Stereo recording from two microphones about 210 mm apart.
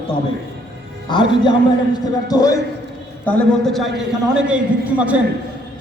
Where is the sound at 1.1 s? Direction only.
20° left (ahead or behind).